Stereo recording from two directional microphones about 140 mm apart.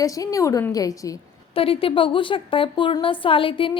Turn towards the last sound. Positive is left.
turn(degrees=40)  # may be behind; listen again after turning